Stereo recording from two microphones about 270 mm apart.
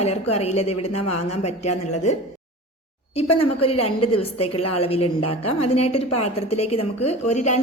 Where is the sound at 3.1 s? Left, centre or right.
Left.